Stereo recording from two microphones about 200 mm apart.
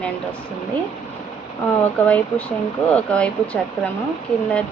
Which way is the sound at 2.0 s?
5° left (ahead or behind).